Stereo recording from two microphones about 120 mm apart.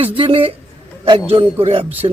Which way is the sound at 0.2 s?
50° right (ahead or behind).